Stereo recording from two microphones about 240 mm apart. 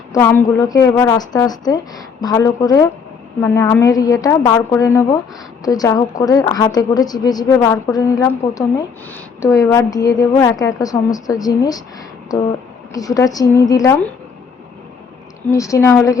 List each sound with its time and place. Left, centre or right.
0.1 s a woman's voice: centre
15.5 s a woman's voice: centre